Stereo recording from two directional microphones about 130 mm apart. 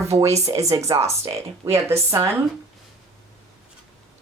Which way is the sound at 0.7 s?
25° right (ahead or behind).